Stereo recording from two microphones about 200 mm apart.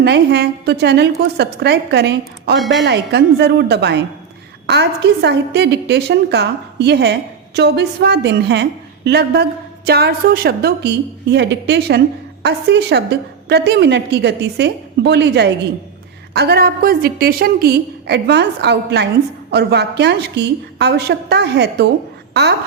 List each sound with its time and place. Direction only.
0.0 s a woman's voice: 55° right (ahead or behind)
2.6 s a woman's voice: centre (ahead or behind)
2.8 s a woman's voice: 55° right (ahead or behind)
22.3 s a sound: 55° right (ahead or behind)